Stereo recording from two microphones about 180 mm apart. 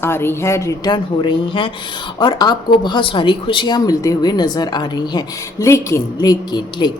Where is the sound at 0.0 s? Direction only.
15° left (ahead or behind).